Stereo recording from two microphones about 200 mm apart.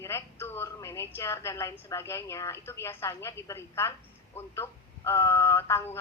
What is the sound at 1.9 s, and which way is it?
A woman's voice, 15° left (ahead or behind).